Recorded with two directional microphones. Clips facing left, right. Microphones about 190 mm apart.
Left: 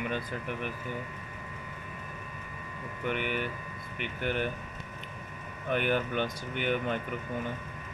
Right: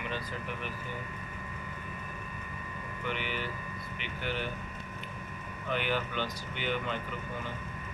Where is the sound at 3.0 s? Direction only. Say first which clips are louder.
Left 4 dB; 55° left (ahead or behind).